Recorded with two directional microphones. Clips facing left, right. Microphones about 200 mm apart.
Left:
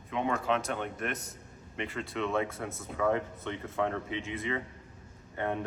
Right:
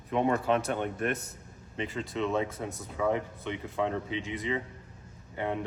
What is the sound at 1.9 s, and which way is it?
Speech, 20° right (ahead or behind).